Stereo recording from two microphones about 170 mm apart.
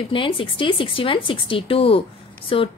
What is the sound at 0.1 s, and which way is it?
A woman's voice, 30° left (ahead or behind).